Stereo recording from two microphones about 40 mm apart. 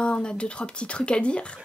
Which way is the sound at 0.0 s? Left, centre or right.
Left.